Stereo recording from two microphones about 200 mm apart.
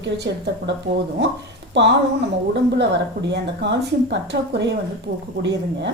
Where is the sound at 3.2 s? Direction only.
60° right (ahead or behind).